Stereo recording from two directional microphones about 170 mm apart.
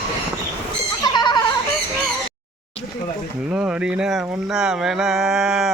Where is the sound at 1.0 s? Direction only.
25° left (ahead or behind).